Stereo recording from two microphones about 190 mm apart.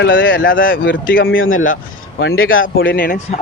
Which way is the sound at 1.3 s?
90° left.